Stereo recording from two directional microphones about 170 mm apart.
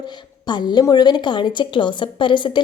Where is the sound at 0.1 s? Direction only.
25° left (ahead or behind).